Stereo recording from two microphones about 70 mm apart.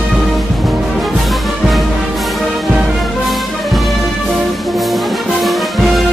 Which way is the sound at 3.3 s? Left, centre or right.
Centre.